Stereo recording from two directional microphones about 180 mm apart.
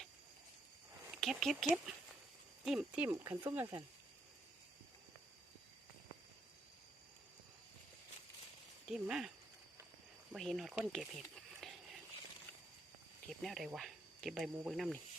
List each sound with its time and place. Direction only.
1.2 s speech: centre (ahead or behind)
8.9 s speech: 5° right (ahead or behind)
10.3 s speech: centre (ahead or behind)
13.4 s speech: centre (ahead or behind)